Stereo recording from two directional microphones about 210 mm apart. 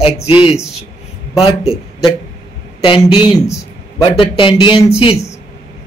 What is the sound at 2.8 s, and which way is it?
A man's voice, 25° left (ahead or behind).